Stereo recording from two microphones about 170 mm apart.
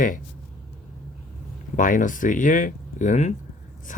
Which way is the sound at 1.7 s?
50° left (ahead or behind).